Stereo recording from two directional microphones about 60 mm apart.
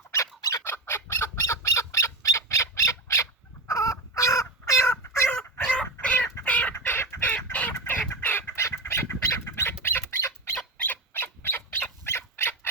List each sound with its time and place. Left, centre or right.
0.6 s fowl: left
3.7 s crow: left
5.6 s a sound: centre
6.4 s chicken: left
6.7 s chicken: left
8.6 s bird: left
10.8 s bird: left